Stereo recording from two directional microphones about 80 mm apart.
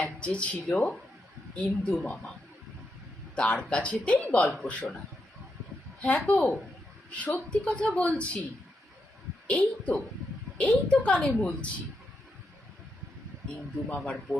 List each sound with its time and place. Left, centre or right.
0.2 s a woman's voice: centre
3.3 s a woman's voice: centre
4.4 s speech: centre
4.7 s a woman's voice: centre
6.0 s a woman's voice: centre
9.5 s a woman's voice: centre
13.9 s a woman's voice: centre